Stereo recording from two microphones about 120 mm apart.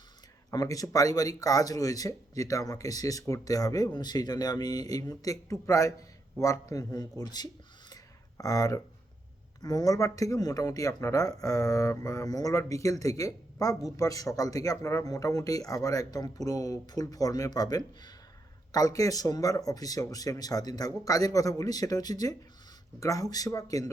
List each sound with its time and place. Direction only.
0.5 s speech: 30° left (ahead or behind)
8.4 s speech: 30° left (ahead or behind)